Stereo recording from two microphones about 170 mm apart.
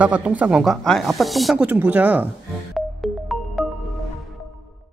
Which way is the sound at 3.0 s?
Centre (ahead or behind).